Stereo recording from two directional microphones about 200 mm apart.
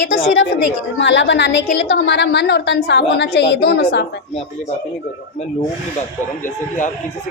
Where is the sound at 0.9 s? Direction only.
65° left (ahead or behind).